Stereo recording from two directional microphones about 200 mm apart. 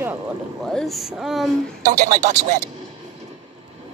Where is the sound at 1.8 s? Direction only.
40° right (ahead or behind).